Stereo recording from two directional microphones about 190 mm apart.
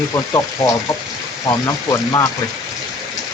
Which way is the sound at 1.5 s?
15° left (ahead or behind).